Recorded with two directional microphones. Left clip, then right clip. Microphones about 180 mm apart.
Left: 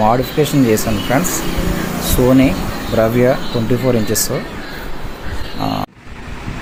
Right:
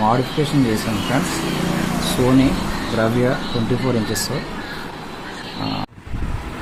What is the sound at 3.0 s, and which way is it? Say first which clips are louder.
Speech: left 6 dB; 20° left (ahead or behind).